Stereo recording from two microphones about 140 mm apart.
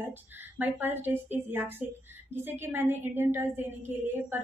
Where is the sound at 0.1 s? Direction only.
15° right (ahead or behind).